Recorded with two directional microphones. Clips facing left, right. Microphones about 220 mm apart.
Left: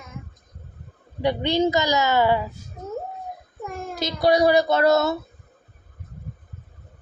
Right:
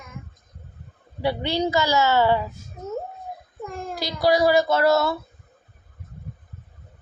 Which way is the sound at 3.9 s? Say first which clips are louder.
Left 1 dB; 20° left (ahead or behind).